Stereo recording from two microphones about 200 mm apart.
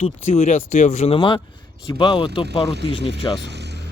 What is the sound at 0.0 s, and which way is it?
Speech, 35° left (ahead or behind).